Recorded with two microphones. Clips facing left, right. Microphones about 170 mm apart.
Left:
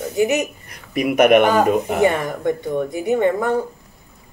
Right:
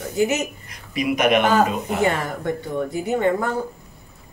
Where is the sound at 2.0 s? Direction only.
20° left (ahead or behind).